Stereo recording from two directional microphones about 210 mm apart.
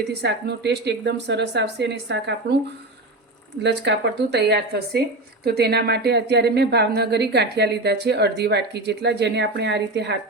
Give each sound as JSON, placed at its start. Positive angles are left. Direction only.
{"t": 0.2, "sound": "speech", "side_deg": -55}
{"t": 3.6, "sound": "speech", "side_deg": -55}